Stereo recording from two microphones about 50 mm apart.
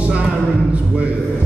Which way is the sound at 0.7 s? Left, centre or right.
Right.